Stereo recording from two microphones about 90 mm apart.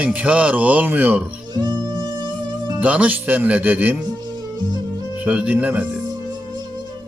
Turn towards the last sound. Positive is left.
turn(degrees=-15)  # may be behind; listen again after turning